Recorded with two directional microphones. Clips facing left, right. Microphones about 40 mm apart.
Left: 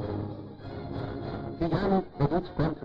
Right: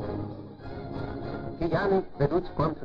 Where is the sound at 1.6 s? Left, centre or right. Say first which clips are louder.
Right 2 dB; centre.